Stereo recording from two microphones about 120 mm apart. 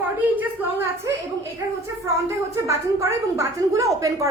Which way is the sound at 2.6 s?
25° right (ahead or behind).